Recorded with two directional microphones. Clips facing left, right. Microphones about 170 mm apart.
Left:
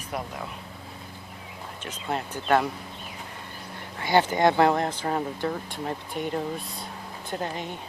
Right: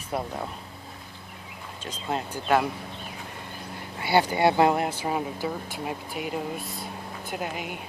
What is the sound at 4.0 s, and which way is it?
Speech, 10° right (ahead or behind).